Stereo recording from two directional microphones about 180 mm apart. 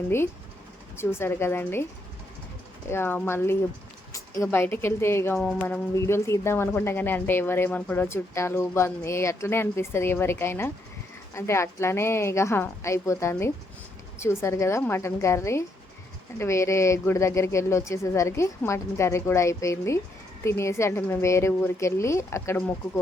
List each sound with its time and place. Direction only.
0.9 s a woman's voice: 15° left (ahead or behind)
2.9 s a woman's voice: 10° left (ahead or behind)